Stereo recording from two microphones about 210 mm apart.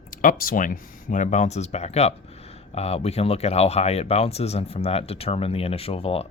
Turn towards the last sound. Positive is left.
turn(degrees=30)  # may be behind; listen again after turning